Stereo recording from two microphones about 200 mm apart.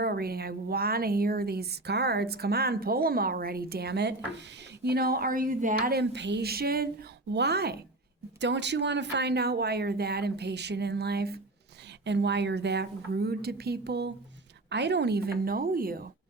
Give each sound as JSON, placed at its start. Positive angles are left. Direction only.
{"t": 0.0, "sound": "a woman's voice", "side_deg": -50}